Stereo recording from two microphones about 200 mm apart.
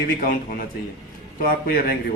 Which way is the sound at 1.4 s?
45° left (ahead or behind).